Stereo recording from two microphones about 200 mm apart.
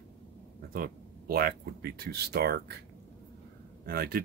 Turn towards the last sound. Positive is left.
turn(degrees=-50)  # may be behind; listen again after turning